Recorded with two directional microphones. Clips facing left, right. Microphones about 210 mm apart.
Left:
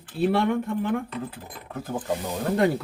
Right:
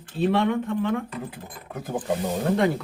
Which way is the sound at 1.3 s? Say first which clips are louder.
Even; 15° right (ahead or behind).